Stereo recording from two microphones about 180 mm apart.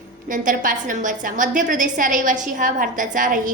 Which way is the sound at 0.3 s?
45° right (ahead or behind).